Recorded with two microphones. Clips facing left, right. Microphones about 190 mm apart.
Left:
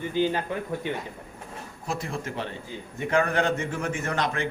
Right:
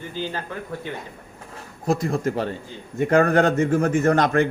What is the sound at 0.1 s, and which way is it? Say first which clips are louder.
Speech: left 5 dB; 15° left (ahead or behind).